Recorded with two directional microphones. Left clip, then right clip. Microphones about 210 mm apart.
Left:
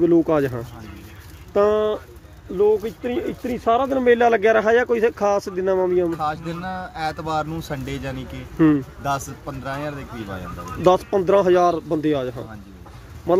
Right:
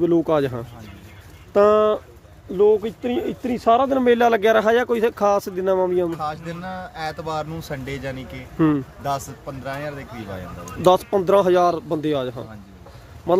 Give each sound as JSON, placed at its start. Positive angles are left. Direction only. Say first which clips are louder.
{"t": 0.0, "sound": "speech", "louder": "left 1 dB", "side_deg": -15}
{"t": 1.5, "sound": "speech", "louder": "right 3 dB", "side_deg": -25}